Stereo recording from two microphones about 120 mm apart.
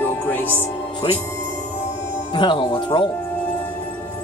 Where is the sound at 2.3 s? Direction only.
40° left (ahead or behind).